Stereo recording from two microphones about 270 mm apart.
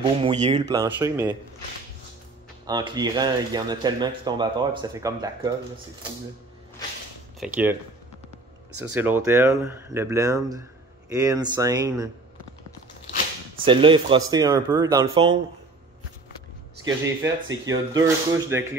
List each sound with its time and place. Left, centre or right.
0.0 s speech: centre
0.7 s speech: centre
2.6 s speech: centre
7.3 s speech: centre
8.9 s speech: centre
13.7 s speech: centre
16.8 s speech: centre